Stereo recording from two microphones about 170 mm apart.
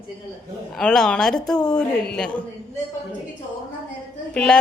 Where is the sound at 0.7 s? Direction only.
5° left (ahead or behind).